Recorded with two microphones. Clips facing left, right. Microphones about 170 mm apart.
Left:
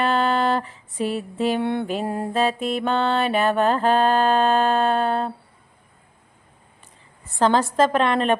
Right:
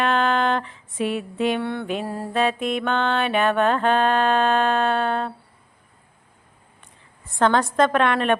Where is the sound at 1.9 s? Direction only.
45° left (ahead or behind).